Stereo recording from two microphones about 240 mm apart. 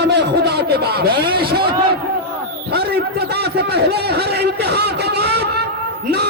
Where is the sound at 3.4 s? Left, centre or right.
Right.